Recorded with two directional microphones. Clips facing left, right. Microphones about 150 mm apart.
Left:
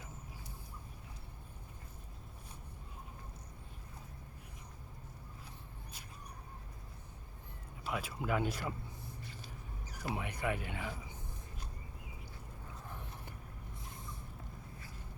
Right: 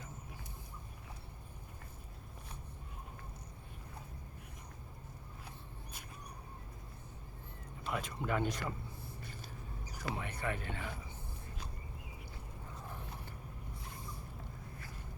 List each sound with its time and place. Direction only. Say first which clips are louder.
7.9 s speech: even; 5° left (ahead or behind)
10.2 s speech: left 4 dB; 15° left (ahead or behind)